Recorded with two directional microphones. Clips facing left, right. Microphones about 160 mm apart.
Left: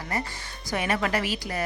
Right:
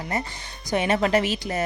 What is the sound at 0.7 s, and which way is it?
Speech, 25° right (ahead or behind).